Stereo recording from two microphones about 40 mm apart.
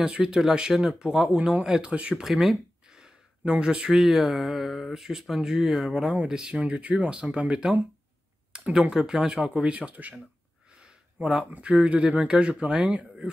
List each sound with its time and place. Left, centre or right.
0.0 s speech: centre
2.2 s speech: centre
6.6 s speech: right
8.5 s a sound: right
8.9 s speech: centre
9.5 s speech: right
10.7 s a sound: right
11.5 s speech: right